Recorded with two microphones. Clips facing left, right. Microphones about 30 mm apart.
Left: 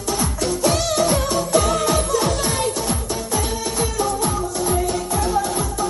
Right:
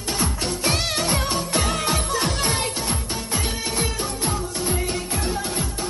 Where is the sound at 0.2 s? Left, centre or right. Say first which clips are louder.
Left 4 dB; right.